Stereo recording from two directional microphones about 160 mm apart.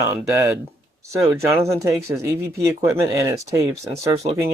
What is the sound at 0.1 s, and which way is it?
Speech, 15° right (ahead or behind).